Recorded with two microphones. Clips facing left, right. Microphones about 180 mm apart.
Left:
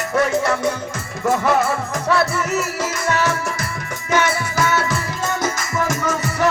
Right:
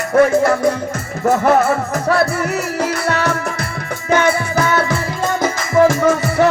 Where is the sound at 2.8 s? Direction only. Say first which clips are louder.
Right 3 dB; 65° right (ahead or behind).